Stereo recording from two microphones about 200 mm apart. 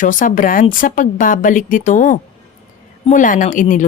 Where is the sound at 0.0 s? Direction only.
40° left (ahead or behind).